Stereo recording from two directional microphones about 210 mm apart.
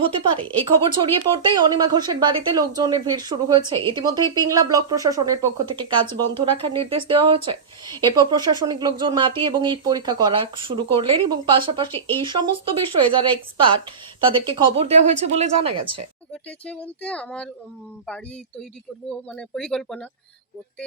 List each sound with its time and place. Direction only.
0.0 s a woman's voice: 25° right (ahead or behind)
11.9 s speech: 10° left (ahead or behind)
12.2 s a woman's voice: 20° right (ahead or behind)
16.3 s speech: 5° left (ahead or behind)
19.4 s speech: 5° left (ahead or behind)